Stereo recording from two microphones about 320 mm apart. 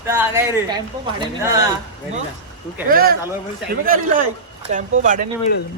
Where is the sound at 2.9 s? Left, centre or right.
Right.